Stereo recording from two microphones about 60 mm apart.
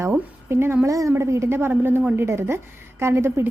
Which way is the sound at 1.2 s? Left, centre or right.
Right.